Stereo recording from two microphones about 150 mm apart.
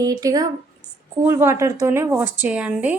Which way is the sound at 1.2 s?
15° right (ahead or behind).